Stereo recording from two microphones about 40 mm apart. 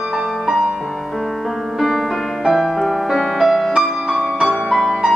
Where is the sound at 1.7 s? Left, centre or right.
Centre.